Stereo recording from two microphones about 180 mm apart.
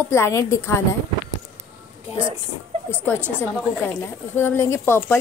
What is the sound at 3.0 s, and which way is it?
A woman's voice, 10° left (ahead or behind).